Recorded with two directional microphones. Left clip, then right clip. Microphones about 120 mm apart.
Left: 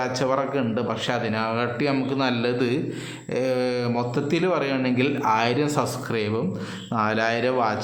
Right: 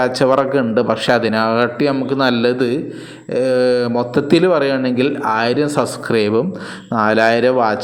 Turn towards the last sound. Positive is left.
turn(degrees=-40)  # may be behind; listen again after turning